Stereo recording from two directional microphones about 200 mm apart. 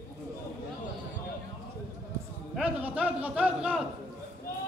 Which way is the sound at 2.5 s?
5° right (ahead or behind).